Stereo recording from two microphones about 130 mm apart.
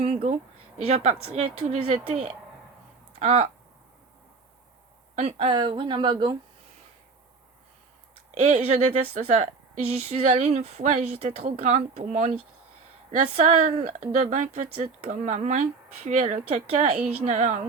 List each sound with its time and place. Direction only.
0.0 s a woman's voice: 55° right (ahead or behind)
5.1 s a woman's voice: 55° right (ahead or behind)
5.5 s speech: 40° right (ahead or behind)
8.4 s speech: 65° right (ahead or behind)
13.2 s speech: 55° right (ahead or behind)
17.0 s a woman's voice: 10° right (ahead or behind)
17.2 s speech: 65° right (ahead or behind)